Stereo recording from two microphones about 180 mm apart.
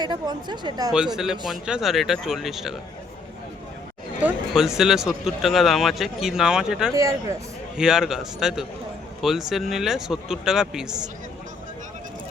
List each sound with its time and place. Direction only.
0.0 s a woman's voice: 25° right (ahead or behind)
0.9 s speech: 5° right (ahead or behind)
4.2 s speech: 5° right (ahead or behind)
6.9 s speech: 15° right (ahead or behind)
7.8 s speech: 5° right (ahead or behind)